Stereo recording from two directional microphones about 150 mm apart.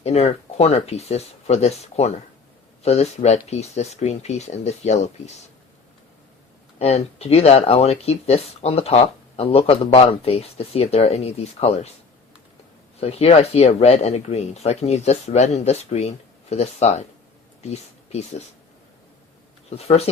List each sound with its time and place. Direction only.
0.0 s speech: 45° left (ahead or behind)
6.7 s speech: 45° left (ahead or behind)
13.0 s speech: 45° left (ahead or behind)
19.7 s speech: 45° left (ahead or behind)